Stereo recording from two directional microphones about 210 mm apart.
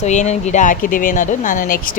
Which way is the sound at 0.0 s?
35° left (ahead or behind).